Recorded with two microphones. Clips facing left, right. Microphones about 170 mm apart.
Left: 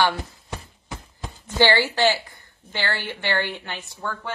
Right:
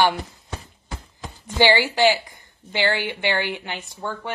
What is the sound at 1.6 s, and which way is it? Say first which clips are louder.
A woman's voice: right 2 dB; 15° right (ahead or behind).